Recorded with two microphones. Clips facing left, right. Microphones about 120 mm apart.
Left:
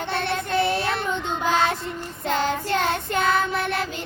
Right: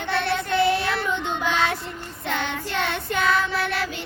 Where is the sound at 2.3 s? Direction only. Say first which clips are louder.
Left 5 dB; 35° left (ahead or behind).